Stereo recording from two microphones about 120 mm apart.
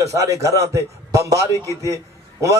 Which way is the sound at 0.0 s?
25° right (ahead or behind).